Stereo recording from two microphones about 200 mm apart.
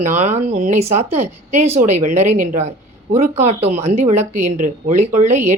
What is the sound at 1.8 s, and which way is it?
Speech, 40° right (ahead or behind).